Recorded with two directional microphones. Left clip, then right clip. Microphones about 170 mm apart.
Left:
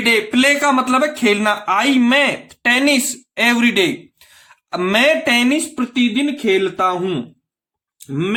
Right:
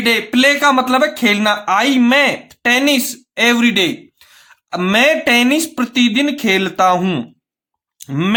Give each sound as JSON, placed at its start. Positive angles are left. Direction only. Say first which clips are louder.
{"t": 0.0, "sound": "speech", "louder": "right 1 dB", "side_deg": -20}
{"t": 5.7, "sound": "speech", "louder": "right 3 dB", "side_deg": -40}